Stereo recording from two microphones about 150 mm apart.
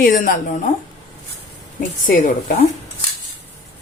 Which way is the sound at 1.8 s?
60° left (ahead or behind).